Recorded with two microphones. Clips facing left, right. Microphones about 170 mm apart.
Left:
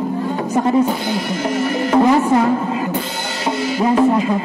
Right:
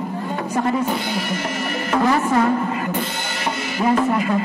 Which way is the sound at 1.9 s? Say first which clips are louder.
Left 5 dB; 20° left (ahead or behind).